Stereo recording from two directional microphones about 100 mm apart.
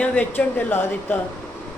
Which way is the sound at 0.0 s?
20° left (ahead or behind).